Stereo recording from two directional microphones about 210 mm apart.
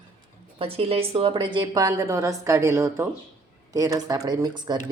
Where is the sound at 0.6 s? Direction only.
25° right (ahead or behind).